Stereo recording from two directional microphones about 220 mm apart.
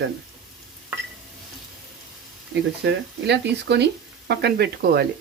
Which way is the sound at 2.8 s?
50° right (ahead or behind).